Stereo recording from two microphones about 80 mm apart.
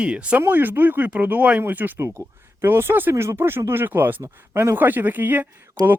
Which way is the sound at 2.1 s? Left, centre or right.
Right.